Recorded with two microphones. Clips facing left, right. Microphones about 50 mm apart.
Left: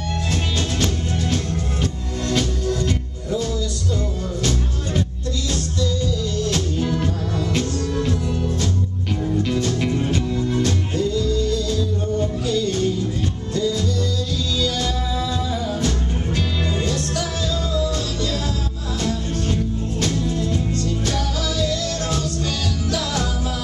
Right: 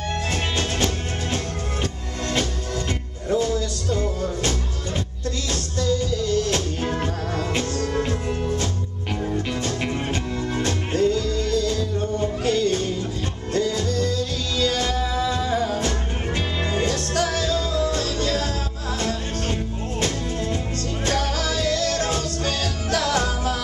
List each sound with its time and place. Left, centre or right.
0.3 s music: right
5.8 s music: right
6.5 s music: right
9.2 s music: centre
11.0 s music: right
16.9 s music: right
19.5 s music: right
21.1 s music: right